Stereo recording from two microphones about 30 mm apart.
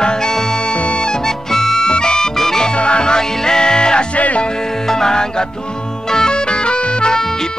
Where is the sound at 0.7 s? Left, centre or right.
Left.